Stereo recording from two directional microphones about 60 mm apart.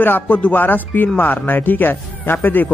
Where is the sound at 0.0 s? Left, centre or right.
Left.